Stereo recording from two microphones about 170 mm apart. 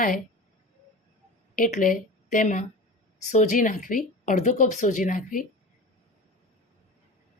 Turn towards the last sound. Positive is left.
turn(degrees=50)  # may be behind; listen again after turning